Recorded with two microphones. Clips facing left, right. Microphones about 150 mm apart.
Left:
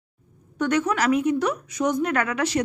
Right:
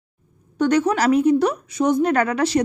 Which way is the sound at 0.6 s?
35° right (ahead or behind).